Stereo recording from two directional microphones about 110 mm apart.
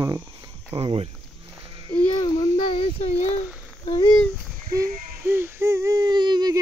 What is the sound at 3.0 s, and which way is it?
Speech, 90° left.